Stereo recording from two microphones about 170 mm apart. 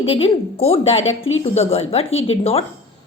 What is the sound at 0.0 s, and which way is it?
A woman's voice, 35° left (ahead or behind).